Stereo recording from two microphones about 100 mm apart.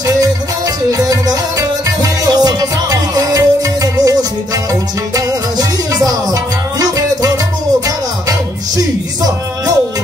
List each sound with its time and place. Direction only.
0.8 s music: 35° right (ahead or behind)
6.0 s music: 35° right (ahead or behind)